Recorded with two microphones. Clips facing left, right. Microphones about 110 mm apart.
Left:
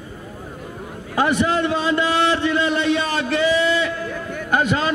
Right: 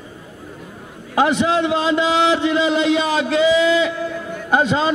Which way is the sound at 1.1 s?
20° right (ahead or behind).